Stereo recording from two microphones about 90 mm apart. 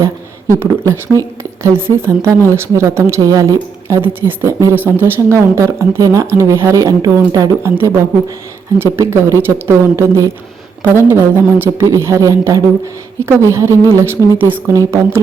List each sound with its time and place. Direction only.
0.6 s speech: 30° right (ahead or behind)
3.2 s speech: 40° right (ahead or behind)
7.6 s speech: 30° right (ahead or behind)
11.1 s speech: 25° right (ahead or behind)
14.7 s speech: 35° right (ahead or behind)